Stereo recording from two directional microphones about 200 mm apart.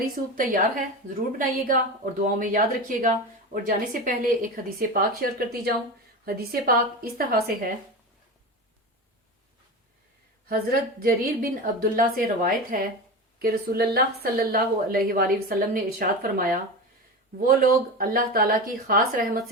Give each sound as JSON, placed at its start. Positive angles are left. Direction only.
{"t": 0.0, "sound": "speech", "side_deg": -45}
{"t": 10.5, "sound": "speech", "side_deg": -50}